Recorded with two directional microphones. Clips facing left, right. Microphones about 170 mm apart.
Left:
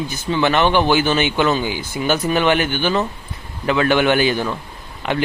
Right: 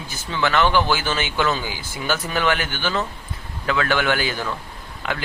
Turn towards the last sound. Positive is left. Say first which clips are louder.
# left 5 dB
turn(degrees=20)  # may be behind; listen again after turning